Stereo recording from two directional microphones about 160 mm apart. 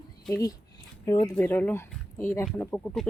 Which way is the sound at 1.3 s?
10° left (ahead or behind).